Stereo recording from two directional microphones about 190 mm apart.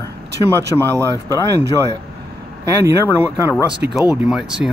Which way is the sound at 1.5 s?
15° right (ahead or behind).